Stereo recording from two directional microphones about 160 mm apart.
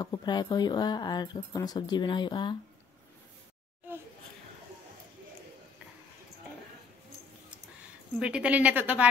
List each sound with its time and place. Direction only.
0.0 s speech: 25° left (ahead or behind)
8.2 s speech: 5° right (ahead or behind)